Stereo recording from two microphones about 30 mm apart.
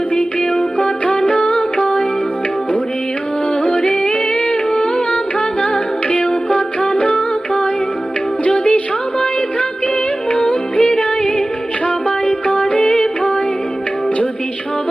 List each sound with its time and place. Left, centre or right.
0.8 s music: left
3.7 s yodeling: left
4.7 s humming: left
6.1 s music: left
8.4 s music: left
10.3 s music: left
10.9 s music: left
12.5 s music: left